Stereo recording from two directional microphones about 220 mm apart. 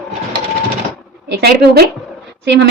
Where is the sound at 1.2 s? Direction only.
45° right (ahead or behind).